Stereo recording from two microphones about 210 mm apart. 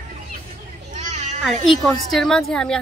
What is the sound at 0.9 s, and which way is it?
Children playing, 35° right (ahead or behind).